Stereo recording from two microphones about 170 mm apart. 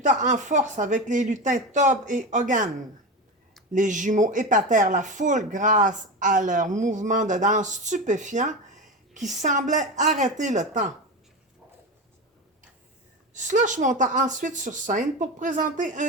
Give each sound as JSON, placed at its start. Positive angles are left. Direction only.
{"t": 0.0, "sound": "speech", "side_deg": -45}
{"t": 3.7, "sound": "speech", "side_deg": -50}
{"t": 13.3, "sound": "speech", "side_deg": -45}